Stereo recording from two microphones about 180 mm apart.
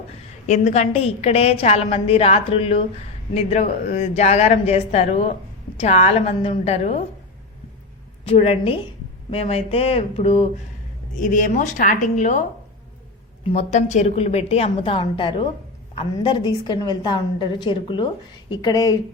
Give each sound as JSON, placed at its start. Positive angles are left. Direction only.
{"t": 0.4, "sound": "a woman's voice", "side_deg": 40}
{"t": 8.3, "sound": "a woman's voice", "side_deg": 30}
{"t": 11.1, "sound": "a woman's voice", "side_deg": 45}
{"t": 13.5, "sound": "a woman's voice", "side_deg": 40}